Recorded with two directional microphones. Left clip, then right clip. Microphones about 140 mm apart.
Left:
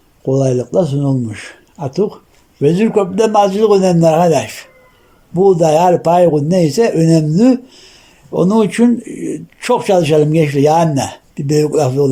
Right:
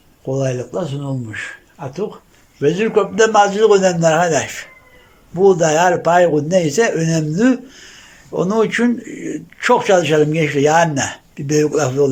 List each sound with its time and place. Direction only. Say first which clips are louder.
0.3 s a man's voice: left 6 dB; 40° left (ahead or behind)